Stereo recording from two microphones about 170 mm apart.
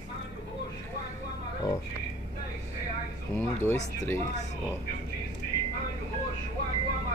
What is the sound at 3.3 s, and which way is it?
Speech, 15° left (ahead or behind).